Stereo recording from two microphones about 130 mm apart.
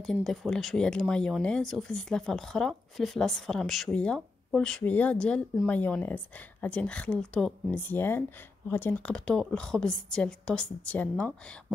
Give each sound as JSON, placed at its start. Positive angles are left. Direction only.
{"t": 0.0, "sound": "a woman's voice", "side_deg": 5}